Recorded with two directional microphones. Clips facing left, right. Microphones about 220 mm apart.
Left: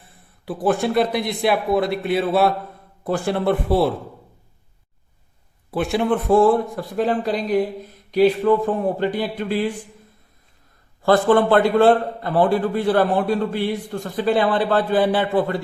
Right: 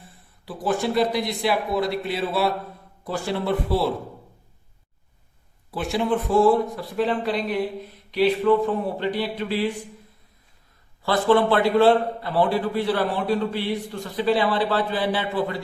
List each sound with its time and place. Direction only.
0.4 s a man's voice: 55° left (ahead or behind)
5.7 s a man's voice: 55° left (ahead or behind)
11.0 s a man's voice: 50° left (ahead or behind)